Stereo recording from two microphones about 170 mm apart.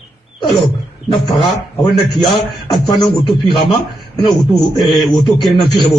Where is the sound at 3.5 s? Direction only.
25° left (ahead or behind).